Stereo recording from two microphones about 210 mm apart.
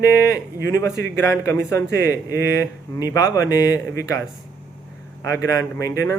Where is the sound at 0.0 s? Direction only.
15° left (ahead or behind).